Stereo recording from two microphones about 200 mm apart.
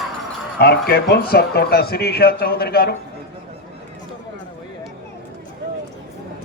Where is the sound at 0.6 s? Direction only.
50° left (ahead or behind).